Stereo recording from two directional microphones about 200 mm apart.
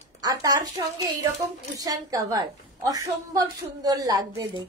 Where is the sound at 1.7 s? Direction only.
20° right (ahead or behind).